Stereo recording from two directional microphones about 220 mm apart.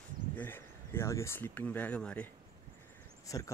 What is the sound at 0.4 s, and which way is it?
Speech, 10° left (ahead or behind).